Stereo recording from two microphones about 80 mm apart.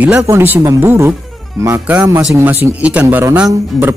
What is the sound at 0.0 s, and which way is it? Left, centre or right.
Speech, centre.